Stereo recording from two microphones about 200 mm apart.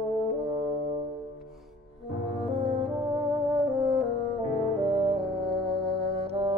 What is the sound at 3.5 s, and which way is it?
Music, 20° right (ahead or behind).